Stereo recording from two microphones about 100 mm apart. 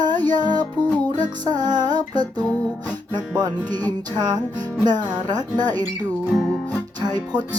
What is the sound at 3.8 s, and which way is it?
Music, 15° left (ahead or behind).